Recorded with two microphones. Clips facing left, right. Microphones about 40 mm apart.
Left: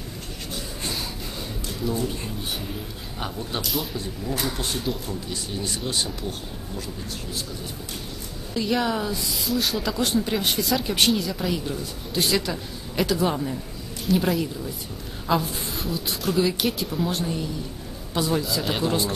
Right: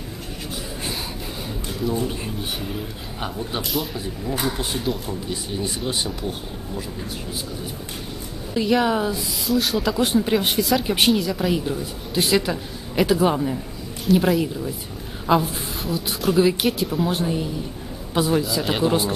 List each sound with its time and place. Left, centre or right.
2.0 s speech: centre
8.8 s speech: centre
9.5 s speech: centre
9.9 s speech: centre
10.9 s speech: centre
11.5 s speech: centre
14.0 s speech: centre
15.2 s speech: centre
15.8 s a man's voice: centre
18.4 s speech: centre
18.8 s speech: centre